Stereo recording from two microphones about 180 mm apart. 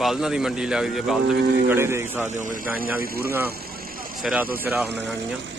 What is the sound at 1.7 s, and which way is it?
Speech, 15° right (ahead or behind).